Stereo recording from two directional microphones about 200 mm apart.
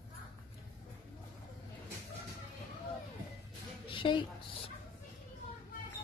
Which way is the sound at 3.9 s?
25° left (ahead or behind).